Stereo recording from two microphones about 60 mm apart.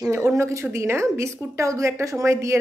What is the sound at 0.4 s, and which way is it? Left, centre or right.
A woman's voice, right.